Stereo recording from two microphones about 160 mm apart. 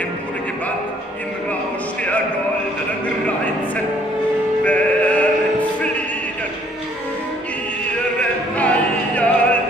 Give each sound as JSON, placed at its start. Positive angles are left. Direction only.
{"t": 4.6, "sound": "music", "side_deg": 10}
{"t": 8.5, "sound": "opera", "side_deg": 10}